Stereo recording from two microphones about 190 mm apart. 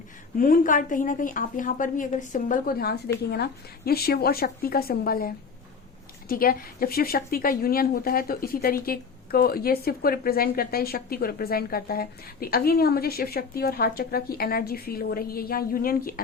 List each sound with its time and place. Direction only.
0.3 s a woman's voice: 45° left (ahead or behind)